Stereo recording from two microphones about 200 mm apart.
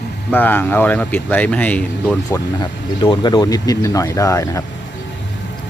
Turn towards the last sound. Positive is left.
turn(degrees=15)  # may be behind; listen again after turning